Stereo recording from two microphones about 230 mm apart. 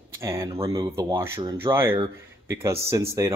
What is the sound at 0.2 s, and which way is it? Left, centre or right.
A man's voice, centre.